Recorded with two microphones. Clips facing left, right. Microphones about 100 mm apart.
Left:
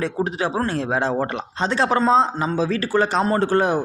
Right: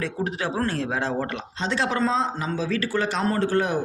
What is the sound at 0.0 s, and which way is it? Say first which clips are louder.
Speech: left 5 dB; 25° left (ahead or behind).